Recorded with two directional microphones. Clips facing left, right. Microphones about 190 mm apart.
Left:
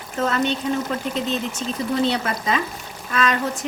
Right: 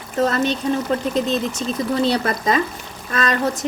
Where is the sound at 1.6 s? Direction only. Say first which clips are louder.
Right 2 dB; 40° right (ahead or behind).